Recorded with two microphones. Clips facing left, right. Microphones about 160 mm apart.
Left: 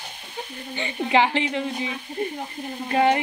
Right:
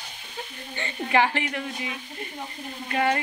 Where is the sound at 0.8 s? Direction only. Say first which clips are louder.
Left 2 dB; 20° left (ahead or behind).